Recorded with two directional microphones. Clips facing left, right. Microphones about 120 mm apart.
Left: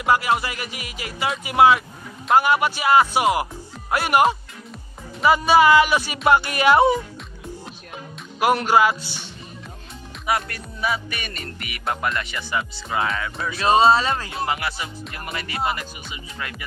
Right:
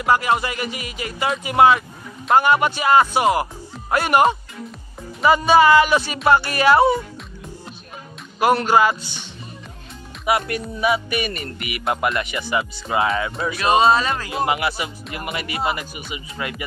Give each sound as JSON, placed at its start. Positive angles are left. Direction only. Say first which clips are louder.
{"t": 0.0, "sound": "speech", "louder": "right 1 dB", "side_deg": 5}
{"t": 8.4, "sound": "speech", "louder": "right 1 dB", "side_deg": 10}
{"t": 10.2, "sound": "music", "louder": "right 4 dB", "side_deg": -10}
{"t": 13.6, "sound": "speech", "louder": "even", "side_deg": 30}
{"t": 14.3, "sound": "music", "louder": "right 4 dB", "side_deg": -15}